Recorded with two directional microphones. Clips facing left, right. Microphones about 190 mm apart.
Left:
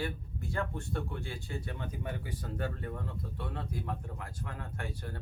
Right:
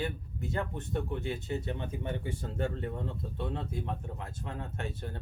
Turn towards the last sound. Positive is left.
turn(degrees=-25)  # may be behind; listen again after turning